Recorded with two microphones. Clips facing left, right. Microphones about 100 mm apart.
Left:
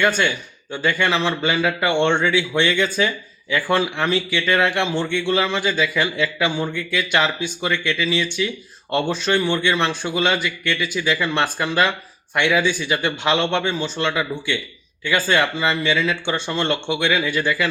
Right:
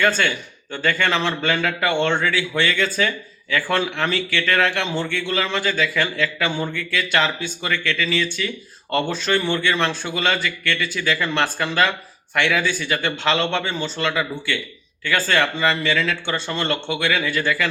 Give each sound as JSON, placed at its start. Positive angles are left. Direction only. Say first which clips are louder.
{"t": 0.0, "sound": "speech", "louder": "left 1 dB", "side_deg": 15}
{"t": 15.5, "sound": "speech", "louder": "even", "side_deg": 5}